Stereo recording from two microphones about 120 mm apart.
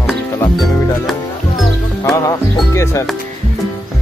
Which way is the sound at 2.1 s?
30° left (ahead or behind).